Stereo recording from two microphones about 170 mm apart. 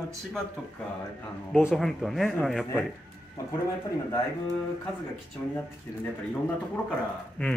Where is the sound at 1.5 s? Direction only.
Centre (ahead or behind).